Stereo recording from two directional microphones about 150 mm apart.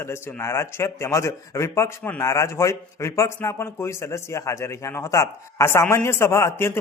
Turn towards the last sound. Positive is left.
turn(degrees=20)  # may be behind; listen again after turning